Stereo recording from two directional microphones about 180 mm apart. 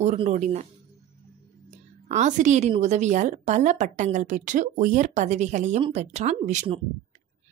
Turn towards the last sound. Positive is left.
turn(degrees=-40)  # may be behind; listen again after turning